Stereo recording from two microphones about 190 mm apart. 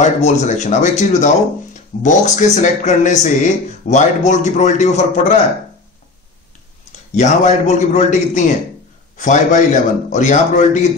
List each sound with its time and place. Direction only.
0.0 s speech: 35° left (ahead or behind)
7.2 s speech: 35° left (ahead or behind)